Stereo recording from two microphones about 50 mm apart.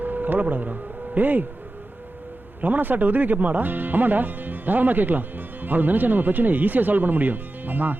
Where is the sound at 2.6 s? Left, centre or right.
Right.